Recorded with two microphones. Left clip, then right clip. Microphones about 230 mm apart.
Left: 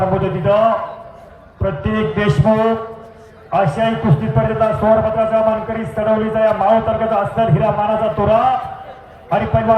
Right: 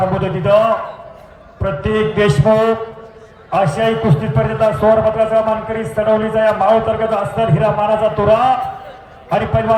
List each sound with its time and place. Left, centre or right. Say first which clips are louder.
0.1 s a man's voice: right 2 dB; right